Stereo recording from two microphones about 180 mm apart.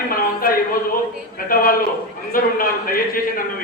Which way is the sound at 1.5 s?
50° left (ahead or behind).